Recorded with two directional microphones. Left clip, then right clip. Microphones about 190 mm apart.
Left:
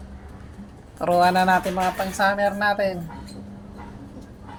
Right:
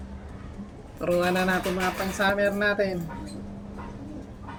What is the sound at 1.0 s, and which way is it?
Speech, 25° left (ahead or behind).